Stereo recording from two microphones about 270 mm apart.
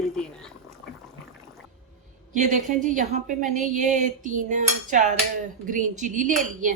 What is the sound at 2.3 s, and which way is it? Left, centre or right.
A woman's voice, right.